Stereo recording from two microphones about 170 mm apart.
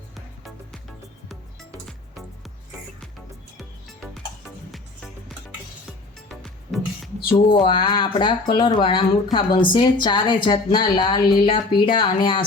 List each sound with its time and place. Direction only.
1.9 s music: centre (ahead or behind)
6.2 s music: centre (ahead or behind)
7.3 s speech: 30° left (ahead or behind)